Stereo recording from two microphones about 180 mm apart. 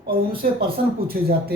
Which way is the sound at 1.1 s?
60° right (ahead or behind).